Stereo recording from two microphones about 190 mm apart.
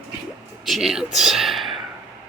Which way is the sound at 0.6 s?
Centre (ahead or behind).